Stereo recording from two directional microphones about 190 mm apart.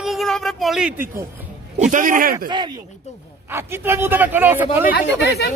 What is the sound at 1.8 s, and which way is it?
Speech, 45° right (ahead or behind).